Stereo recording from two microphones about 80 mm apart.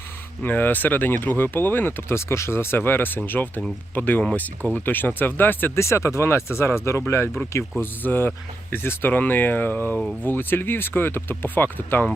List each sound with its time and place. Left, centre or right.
0.4 s speech: left
5.8 s speech: left
7.8 s speech: left